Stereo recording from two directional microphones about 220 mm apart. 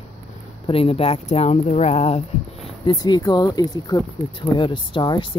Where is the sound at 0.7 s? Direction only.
25° left (ahead or behind).